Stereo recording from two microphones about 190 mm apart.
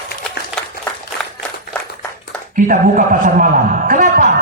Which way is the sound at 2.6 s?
45° right (ahead or behind).